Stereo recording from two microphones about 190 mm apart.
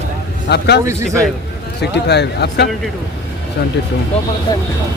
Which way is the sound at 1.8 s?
60° left (ahead or behind).